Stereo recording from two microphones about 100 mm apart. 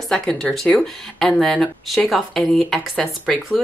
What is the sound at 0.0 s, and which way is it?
Speech, 5° left (ahead or behind).